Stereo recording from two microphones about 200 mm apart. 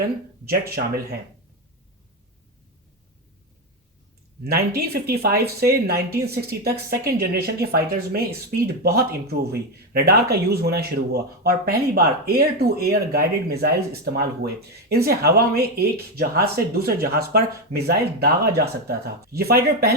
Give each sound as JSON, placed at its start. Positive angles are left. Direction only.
{"t": 4.4, "sound": "speech", "side_deg": -50}